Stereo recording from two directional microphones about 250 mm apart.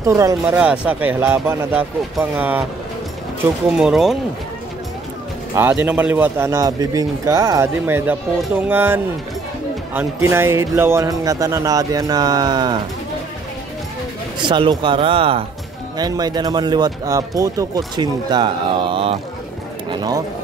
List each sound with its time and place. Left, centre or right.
0.0 s a man's voice: centre
3.7 s speech: centre
5.6 s a man's voice: centre
14.4 s a man's voice: centre